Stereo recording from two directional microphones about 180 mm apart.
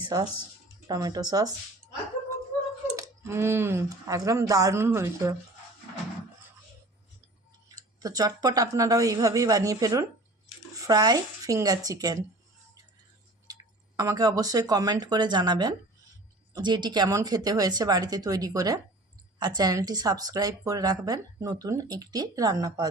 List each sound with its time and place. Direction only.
0.0 s speech: 25° right (ahead or behind)
2.9 s speech: 15° right (ahead or behind)
8.0 s speech: 20° right (ahead or behind)
13.5 s speech: 20° right (ahead or behind)